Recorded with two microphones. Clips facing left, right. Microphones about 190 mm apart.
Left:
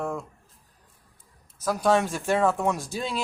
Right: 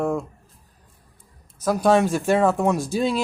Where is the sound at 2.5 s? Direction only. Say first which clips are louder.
Right 5 dB; 30° right (ahead or behind).